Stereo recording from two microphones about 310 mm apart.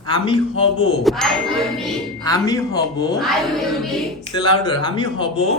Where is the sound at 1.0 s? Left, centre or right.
Centre.